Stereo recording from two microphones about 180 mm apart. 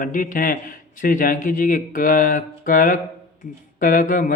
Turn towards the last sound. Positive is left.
turn(degrees=50)  # may be behind; listen again after turning